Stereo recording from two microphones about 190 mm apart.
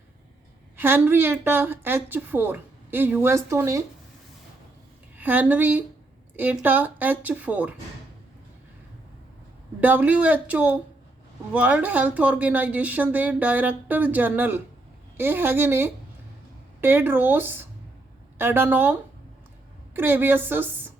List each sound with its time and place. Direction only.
0.8 s a woman's voice: 10° right (ahead or behind)
5.1 s a woman's voice: 10° right (ahead or behind)
9.8 s a woman's voice: 10° right (ahead or behind)